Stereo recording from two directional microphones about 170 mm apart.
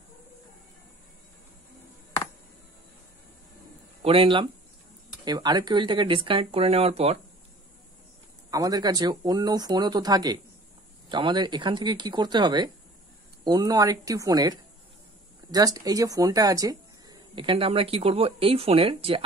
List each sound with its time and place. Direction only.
4.0 s speech: 35° right (ahead or behind)
8.5 s speech: 20° right (ahead or behind)